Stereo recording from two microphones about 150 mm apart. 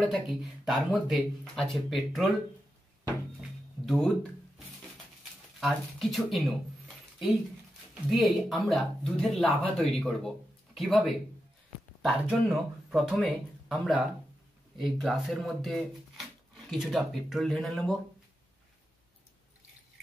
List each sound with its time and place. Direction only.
0.0 s speech: centre (ahead or behind)
3.3 s music: centre (ahead or behind)
5.6 s speech: centre (ahead or behind)
7.9 s speech: centre (ahead or behind)